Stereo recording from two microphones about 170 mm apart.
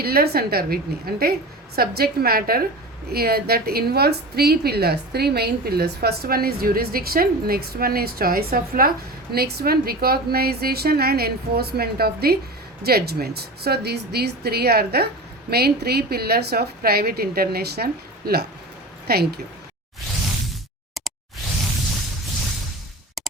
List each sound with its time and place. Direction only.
0.0 s a woman's voice: 65° right (ahead or behind)